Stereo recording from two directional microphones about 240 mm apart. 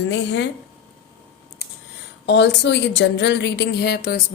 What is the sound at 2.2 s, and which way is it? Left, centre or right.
A woman's voice, left.